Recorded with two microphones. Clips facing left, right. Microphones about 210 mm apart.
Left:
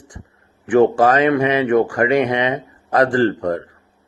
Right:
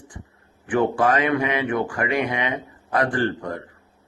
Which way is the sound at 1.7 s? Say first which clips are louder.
Left 9 dB; 90° left.